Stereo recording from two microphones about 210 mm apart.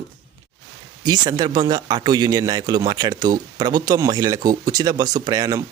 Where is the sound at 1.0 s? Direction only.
20° right (ahead or behind).